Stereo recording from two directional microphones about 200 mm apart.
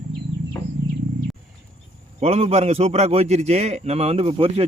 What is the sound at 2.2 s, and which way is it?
A man's voice, 30° right (ahead or behind).